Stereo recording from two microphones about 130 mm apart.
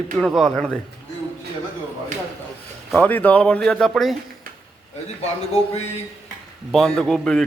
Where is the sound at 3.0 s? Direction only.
10° left (ahead or behind).